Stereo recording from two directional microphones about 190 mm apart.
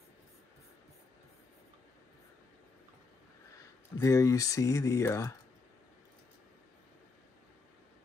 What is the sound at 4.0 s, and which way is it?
Speech, 15° left (ahead or behind).